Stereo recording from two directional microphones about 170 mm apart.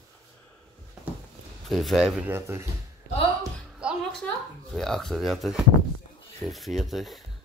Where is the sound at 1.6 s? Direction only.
Centre (ahead or behind).